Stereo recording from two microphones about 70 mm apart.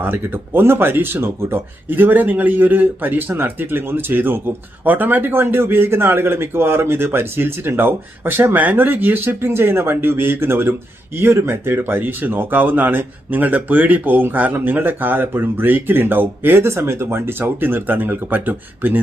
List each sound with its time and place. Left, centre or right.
0.0 s a man's voice: right